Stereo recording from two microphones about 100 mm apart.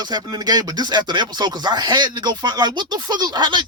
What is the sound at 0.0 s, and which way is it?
Speech, 45° right (ahead or behind).